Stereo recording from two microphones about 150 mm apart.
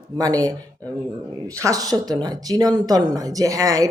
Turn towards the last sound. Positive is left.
turn(degrees=-25)  # may be behind; listen again after turning